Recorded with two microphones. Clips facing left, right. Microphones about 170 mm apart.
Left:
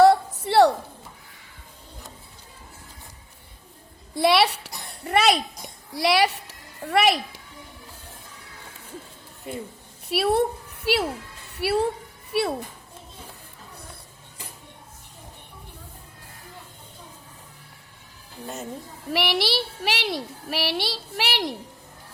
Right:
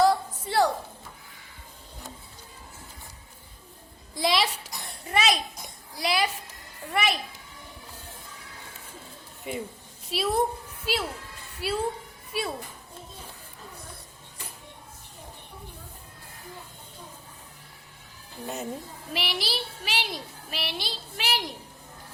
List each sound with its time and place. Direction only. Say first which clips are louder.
0.0 s a sound: left 6 dB; 70° left (ahead or behind)
4.1 s a sound: left 6 dB; 65° left (ahead or behind)
5.9 s a woman's voice: left 6 dB; 70° left (ahead or behind)
10.1 s a woman's voice: left 4 dB; 65° left (ahead or behind)
18.4 s speech: right 1 dB; 5° right (ahead or behind)
19.1 s a woman's voice: left 7 dB; 70° left (ahead or behind)